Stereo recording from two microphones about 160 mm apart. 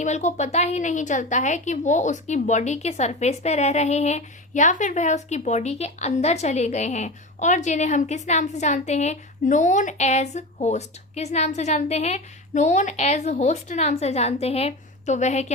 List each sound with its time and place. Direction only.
0.0 s a woman's voice: 45° left (ahead or behind)